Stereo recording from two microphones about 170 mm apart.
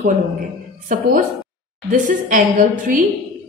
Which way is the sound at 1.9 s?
50° right (ahead or behind).